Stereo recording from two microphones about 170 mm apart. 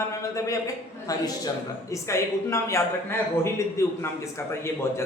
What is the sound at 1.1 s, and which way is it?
A man's voice, 20° left (ahead or behind).